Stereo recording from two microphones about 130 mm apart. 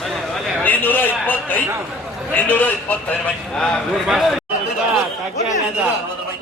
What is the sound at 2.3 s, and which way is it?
A man's voice, 15° left (ahead or behind).